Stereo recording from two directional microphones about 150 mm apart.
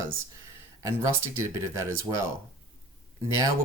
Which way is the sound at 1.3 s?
20° right (ahead or behind).